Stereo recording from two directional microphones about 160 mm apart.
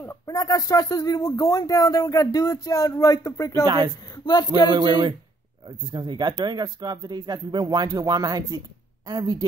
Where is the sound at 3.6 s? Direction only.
25° right (ahead or behind).